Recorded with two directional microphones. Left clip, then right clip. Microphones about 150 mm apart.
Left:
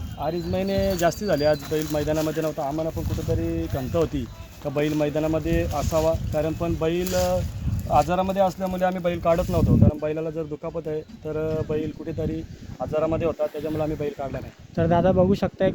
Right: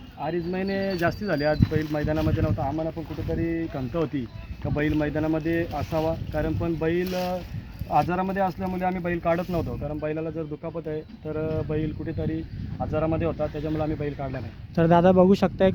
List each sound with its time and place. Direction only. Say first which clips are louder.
0.2 s speech: left 2 dB; 35° left (ahead or behind)
3.3 s speech: left 2 dB; centre (ahead or behind)
3.8 s speech: left 4 dB; 15° left (ahead or behind)
7.0 s speech: left 4 dB; 25° right (ahead or behind)
7.9 s speech: left 3 dB; 20° left (ahead or behind)
14.8 s speech: right 2 dB; 55° right (ahead or behind)